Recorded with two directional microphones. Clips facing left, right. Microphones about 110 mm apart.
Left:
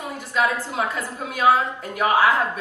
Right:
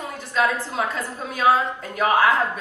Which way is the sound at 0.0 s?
15° left (ahead or behind).